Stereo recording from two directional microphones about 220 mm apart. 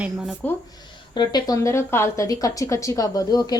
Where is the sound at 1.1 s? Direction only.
20° left (ahead or behind).